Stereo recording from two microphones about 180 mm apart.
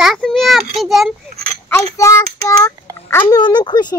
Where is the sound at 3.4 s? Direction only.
25° left (ahead or behind).